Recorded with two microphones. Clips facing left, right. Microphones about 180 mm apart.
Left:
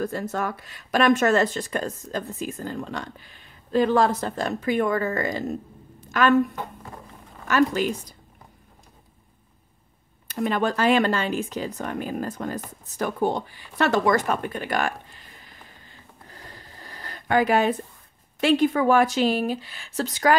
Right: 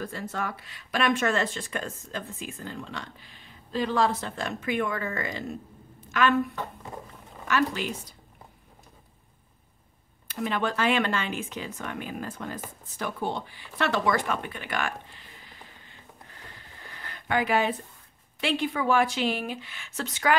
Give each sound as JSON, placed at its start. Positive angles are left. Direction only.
{"t": 0.0, "sound": "speech", "side_deg": 45}
{"t": 7.4, "sound": "speech", "side_deg": 45}
{"t": 10.2, "sound": "speech", "side_deg": 40}
{"t": 12.9, "sound": "a sound", "side_deg": 45}
{"t": 18.4, "sound": "speech", "side_deg": 45}